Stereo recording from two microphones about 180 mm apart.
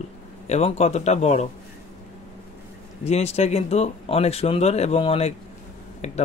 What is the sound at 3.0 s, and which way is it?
Speech, 35° left (ahead or behind).